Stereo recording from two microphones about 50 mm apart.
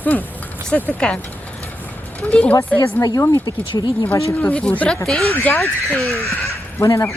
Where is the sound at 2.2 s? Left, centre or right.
Left.